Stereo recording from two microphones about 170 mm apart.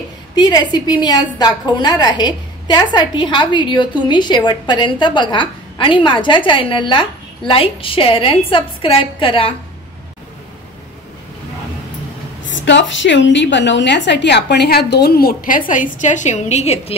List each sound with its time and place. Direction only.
0.4 s a woman's voice: 25° left (ahead or behind)
12.4 s a woman's voice: 90° left; by 16.9 s 40° left (ahead or behind)